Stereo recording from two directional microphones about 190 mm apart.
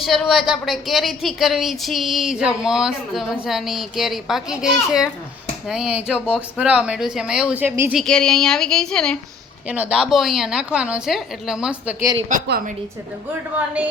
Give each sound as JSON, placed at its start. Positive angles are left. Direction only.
{"t": 0.0, "sound": "speech", "side_deg": 0}
{"t": 8.0, "sound": "speech", "side_deg": 5}
{"t": 9.6, "sound": "speech", "side_deg": -10}
{"t": 12.5, "sound": "a woman's voice", "side_deg": -50}